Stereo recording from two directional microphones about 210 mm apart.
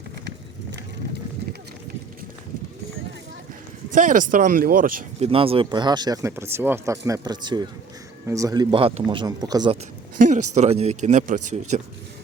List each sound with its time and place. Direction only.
3.9 s speech: 40° right (ahead or behind)
5.2 s speech: 25° right (ahead or behind)
10.2 s speech: 35° right (ahead or behind)